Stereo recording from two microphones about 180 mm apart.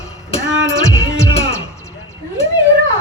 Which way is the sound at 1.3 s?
35° left (ahead or behind).